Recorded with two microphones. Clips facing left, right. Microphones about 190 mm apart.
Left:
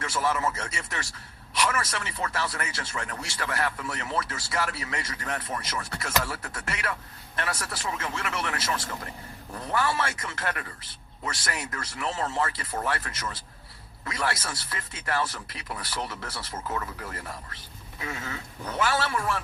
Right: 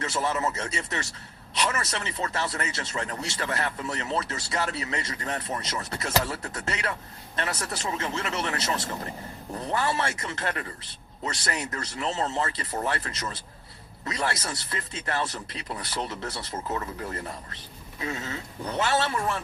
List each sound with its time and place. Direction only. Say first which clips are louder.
0.0 s speech: even; 25° right (ahead or behind)
11.8 s speech: right 1 dB; 25° right (ahead or behind)
18.1 s speech: right 1 dB; 25° right (ahead or behind)